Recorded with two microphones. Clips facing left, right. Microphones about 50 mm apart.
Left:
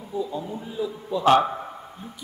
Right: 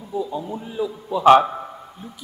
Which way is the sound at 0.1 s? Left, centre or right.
Right.